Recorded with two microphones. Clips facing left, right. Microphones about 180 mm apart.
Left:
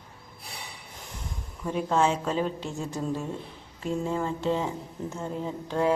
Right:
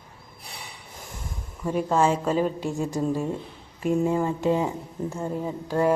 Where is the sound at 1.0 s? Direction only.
45° right (ahead or behind).